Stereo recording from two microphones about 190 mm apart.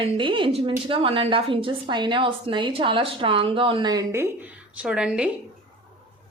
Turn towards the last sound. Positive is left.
turn(degrees=-5)  # may be behind; listen again after turning